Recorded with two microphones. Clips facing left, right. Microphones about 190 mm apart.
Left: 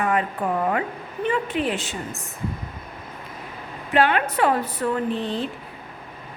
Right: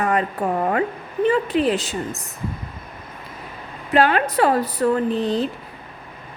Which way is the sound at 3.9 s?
35° right (ahead or behind).